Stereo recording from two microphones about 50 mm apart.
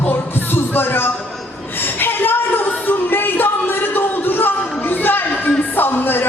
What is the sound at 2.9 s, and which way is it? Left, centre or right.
Music, left.